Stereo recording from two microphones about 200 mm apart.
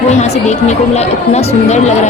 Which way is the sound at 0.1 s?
35° left (ahead or behind).